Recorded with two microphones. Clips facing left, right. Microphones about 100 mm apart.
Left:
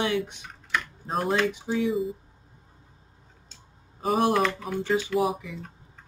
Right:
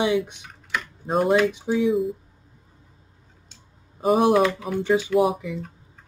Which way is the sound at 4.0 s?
5° right (ahead or behind).